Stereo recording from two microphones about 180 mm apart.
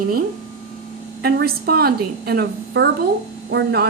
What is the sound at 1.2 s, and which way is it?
A woman's voice, 60° right (ahead or behind).